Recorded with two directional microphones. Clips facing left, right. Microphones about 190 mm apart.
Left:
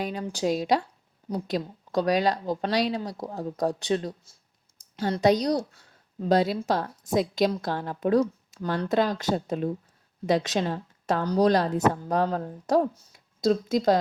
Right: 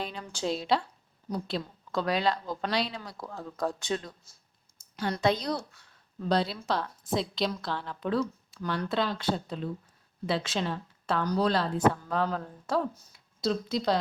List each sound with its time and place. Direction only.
0.0 s speech: 40° left (ahead or behind)
1.3 s speech: 40° left (ahead or behind)
4.8 s a sound: 40° left (ahead or behind)
5.2 s a woman's voice: 40° left (ahead or behind)